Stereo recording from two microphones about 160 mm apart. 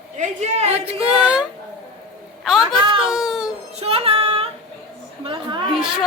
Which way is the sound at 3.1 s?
5° right (ahead or behind).